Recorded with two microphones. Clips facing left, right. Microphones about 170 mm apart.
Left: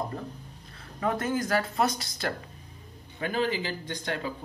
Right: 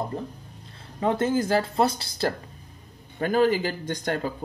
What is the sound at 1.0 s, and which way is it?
Speech, 25° right (ahead or behind).